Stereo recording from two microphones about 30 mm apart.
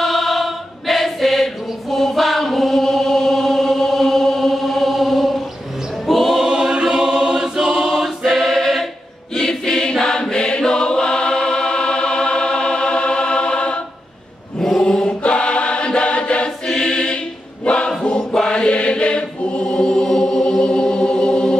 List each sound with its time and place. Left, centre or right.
0.0 s choir: centre
6.0 s music: centre
6.4 s choir: right
7.9 s choir: centre
9.9 s chant: left
10.3 s music: left
14.8 s choir: left
15.2 s choir: left
16.6 s choir: left
18.3 s chant: left
20.8 s music: left